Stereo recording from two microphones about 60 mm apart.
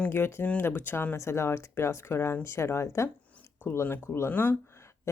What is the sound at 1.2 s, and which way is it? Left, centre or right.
Speech, left.